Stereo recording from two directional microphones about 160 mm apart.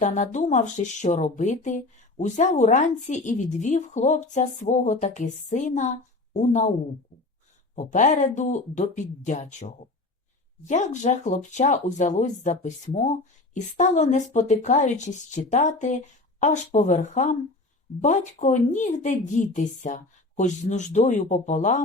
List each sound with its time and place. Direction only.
0.0 s speech: 50° left (ahead or behind)
7.8 s speech: 50° left (ahead or behind)
10.7 s speech: 50° left (ahead or behind)